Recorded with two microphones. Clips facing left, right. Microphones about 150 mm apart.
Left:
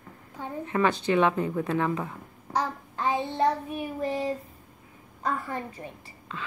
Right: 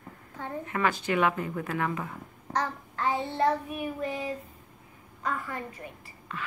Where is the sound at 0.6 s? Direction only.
25° left (ahead or behind).